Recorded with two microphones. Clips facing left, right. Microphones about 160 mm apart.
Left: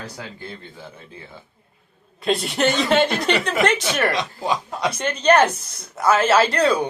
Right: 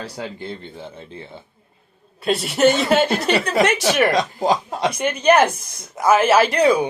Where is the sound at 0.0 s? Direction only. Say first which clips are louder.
Right 5 dB; 25° right (ahead or behind).